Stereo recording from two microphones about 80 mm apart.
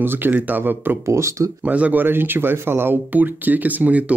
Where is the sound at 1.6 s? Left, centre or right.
Centre.